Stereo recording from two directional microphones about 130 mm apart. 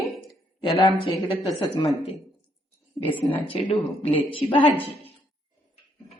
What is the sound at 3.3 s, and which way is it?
A woman's voice, 40° left (ahead or behind).